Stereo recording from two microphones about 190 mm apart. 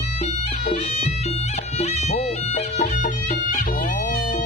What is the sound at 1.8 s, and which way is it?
Music, 35° left (ahead or behind).